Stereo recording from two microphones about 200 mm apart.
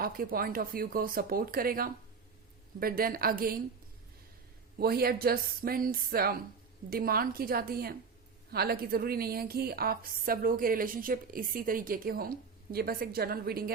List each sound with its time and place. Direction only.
0.0 s a woman's voice: 45° right (ahead or behind)
4.8 s a woman's voice: 50° right (ahead or behind)